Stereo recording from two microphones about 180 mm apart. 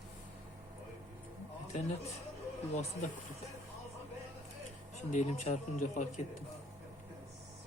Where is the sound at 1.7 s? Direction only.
40° left (ahead or behind).